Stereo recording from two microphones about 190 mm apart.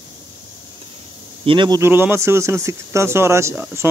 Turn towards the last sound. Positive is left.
turn(degrees=-15)  # may be behind; listen again after turning